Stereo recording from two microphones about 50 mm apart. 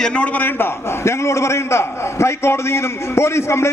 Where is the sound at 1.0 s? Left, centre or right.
Left.